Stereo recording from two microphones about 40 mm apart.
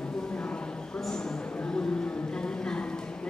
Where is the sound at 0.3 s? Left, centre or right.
Left.